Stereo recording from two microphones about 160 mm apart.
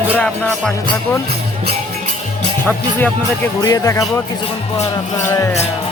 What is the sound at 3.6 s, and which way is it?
Music, 20° left (ahead or behind).